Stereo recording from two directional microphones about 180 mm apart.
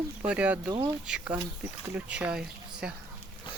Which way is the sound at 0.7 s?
25° right (ahead or behind).